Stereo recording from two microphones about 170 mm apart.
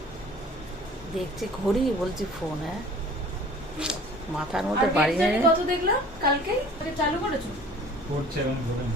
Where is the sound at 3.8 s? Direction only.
5° right (ahead or behind).